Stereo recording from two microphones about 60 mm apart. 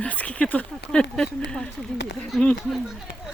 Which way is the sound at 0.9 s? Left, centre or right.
Centre.